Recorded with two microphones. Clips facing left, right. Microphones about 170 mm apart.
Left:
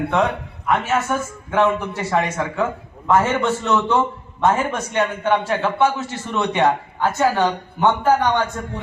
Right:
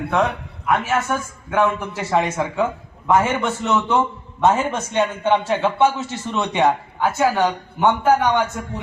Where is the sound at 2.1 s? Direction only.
15° right (ahead or behind).